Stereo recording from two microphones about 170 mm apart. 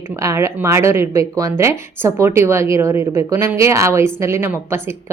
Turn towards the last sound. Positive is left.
turn(degrees=-15)  # may be behind; listen again after turning